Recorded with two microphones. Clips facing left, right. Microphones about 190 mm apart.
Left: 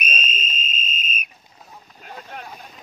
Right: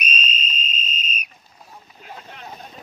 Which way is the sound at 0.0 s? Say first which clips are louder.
Even; 50° left (ahead or behind).